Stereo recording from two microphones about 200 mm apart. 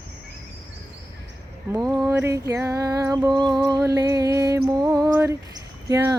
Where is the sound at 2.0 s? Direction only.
15° right (ahead or behind).